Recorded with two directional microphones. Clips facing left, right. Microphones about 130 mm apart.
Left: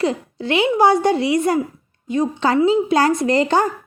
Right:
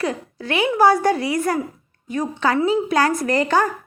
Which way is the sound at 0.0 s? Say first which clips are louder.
Left 4 dB; 25° left (ahead or behind).